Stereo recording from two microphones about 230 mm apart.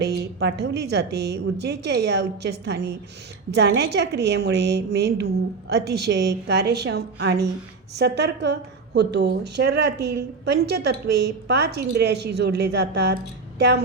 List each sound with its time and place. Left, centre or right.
0.0 s a woman's voice: right